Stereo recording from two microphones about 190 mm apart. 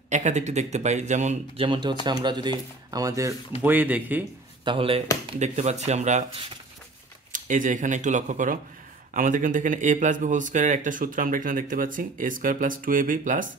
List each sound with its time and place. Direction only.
0.1 s speech: 40° right (ahead or behind); by 4.2 s 10° right (ahead or behind)
4.6 s speech: 30° right (ahead or behind)
7.3 s speech: 45° right (ahead or behind)